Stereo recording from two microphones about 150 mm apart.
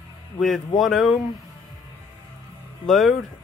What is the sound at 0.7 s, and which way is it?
Speech, centre (ahead or behind).